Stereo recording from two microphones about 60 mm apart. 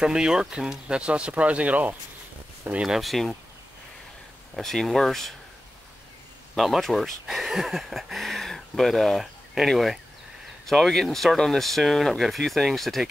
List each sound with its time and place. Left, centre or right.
0.0 s speech: centre; by 2.8 s right
3.0 s speech: centre
4.6 s speech: centre
6.5 s speech: centre